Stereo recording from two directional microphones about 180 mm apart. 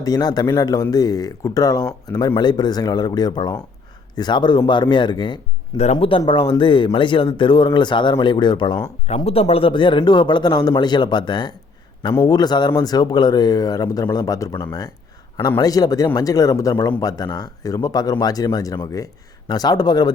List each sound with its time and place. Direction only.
0.0 s speech: 20° left (ahead or behind)